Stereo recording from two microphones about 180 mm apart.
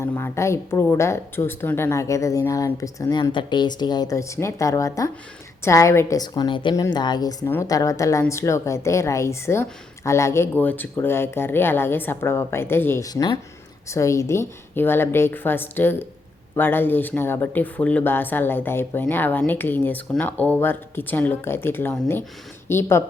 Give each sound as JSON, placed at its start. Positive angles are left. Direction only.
{"t": 0.0, "sound": "a woman's voice", "side_deg": 10}